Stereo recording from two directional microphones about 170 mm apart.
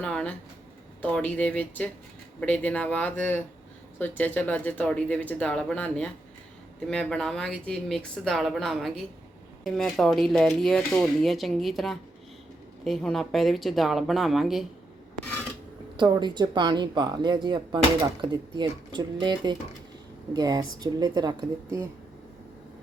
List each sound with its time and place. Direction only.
0.0 s a sound: 5° left (ahead or behind)
1.0 s speech: 5° left (ahead or behind)
16.0 s speech: 25° right (ahead or behind)